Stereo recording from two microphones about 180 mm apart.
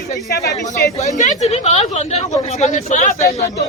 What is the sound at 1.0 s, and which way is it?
Speech, 40° left (ahead or behind).